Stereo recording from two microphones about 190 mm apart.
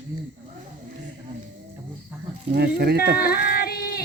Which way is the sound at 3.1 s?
50° left (ahead or behind).